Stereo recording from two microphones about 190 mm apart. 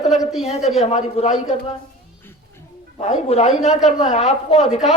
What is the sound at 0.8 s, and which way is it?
Speech, 30° left (ahead or behind).